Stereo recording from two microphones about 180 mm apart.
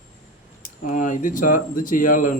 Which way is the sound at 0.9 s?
45° left (ahead or behind).